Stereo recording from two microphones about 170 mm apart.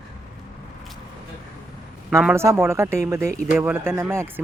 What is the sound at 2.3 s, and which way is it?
Speech, 15° right (ahead or behind).